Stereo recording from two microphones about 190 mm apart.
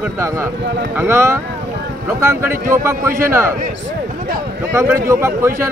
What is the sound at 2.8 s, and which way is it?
Speech, 15° right (ahead or behind).